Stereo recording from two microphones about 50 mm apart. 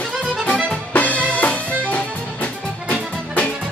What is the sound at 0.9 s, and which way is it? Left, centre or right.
Music, left.